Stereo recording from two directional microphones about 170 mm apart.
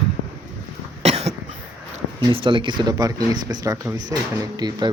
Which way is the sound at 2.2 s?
30° right (ahead or behind).